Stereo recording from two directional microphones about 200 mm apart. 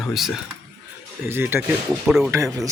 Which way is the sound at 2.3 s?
15° right (ahead or behind).